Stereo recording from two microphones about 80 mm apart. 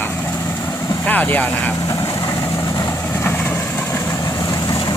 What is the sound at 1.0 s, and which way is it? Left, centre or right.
Speech, left.